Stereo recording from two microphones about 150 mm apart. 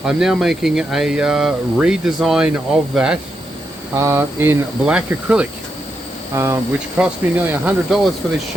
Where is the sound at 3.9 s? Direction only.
20° right (ahead or behind).